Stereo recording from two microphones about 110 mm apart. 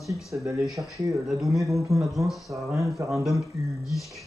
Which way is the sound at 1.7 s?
30° right (ahead or behind).